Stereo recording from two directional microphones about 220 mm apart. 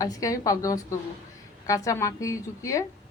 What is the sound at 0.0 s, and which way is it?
A woman's voice, 15° left (ahead or behind).